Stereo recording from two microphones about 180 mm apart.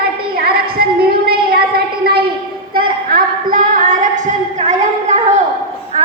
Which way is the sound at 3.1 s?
50° right (ahead or behind).